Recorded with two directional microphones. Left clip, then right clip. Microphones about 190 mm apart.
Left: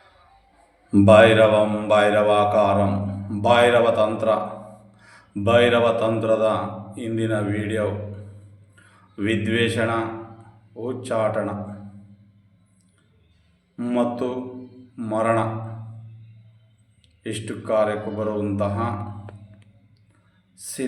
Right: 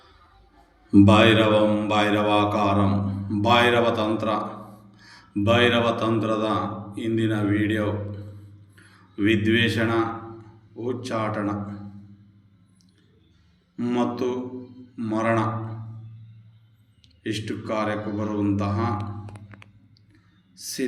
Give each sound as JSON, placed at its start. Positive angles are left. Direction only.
{"t": 0.9, "sound": "mantra", "side_deg": 40}
{"t": 4.9, "sound": "a man's voice", "side_deg": 35}
{"t": 10.8, "sound": "mantra", "side_deg": 35}
{"t": 13.7, "sound": "mantra", "side_deg": 40}
{"t": 17.2, "sound": "mantra", "side_deg": 35}
{"t": 20.6, "sound": "speech", "side_deg": 35}